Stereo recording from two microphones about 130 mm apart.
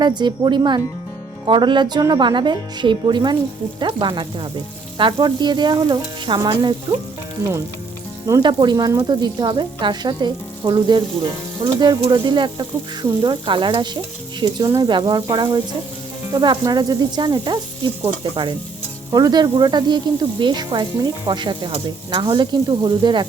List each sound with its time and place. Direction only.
0.0 s speech: 35° right (ahead or behind)
8.3 s speech: 35° right (ahead or behind)